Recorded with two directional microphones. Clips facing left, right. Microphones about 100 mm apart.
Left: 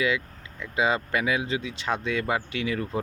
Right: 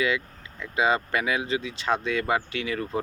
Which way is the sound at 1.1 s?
15° left (ahead or behind).